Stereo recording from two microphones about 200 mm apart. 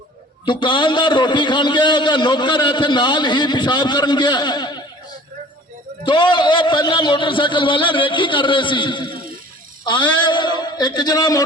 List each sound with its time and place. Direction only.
0.4 s a man's voice: 25° left (ahead or behind)
6.1 s a man's voice: 25° left (ahead or behind)